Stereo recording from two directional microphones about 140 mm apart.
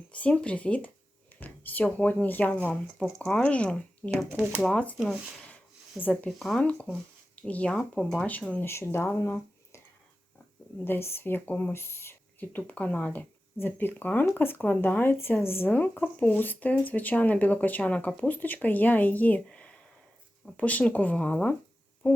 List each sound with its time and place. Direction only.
0.1 s speech: 10° left (ahead or behind)